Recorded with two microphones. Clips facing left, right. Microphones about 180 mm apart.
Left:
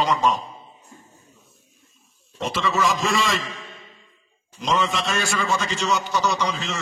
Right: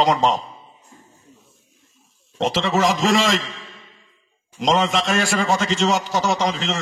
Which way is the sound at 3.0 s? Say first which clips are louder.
Right 5 dB; 90° right.